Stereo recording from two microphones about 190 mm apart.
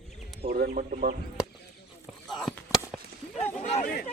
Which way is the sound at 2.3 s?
Centre (ahead or behind).